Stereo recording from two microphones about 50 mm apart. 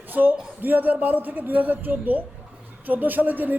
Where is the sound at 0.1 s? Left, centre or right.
Right.